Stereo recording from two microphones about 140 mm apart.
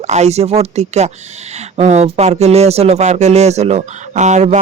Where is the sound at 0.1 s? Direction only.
50° right (ahead or behind).